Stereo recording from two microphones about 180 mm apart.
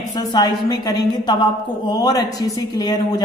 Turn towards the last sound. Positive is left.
turn(degrees=20)  # may be behind; listen again after turning